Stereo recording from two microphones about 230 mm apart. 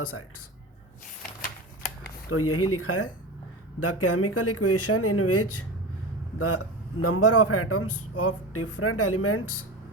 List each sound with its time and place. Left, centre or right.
0.0 s speech: left
1.4 s typewriter: left
2.3 s speech: left
3.8 s speech: left
7.0 s speech: left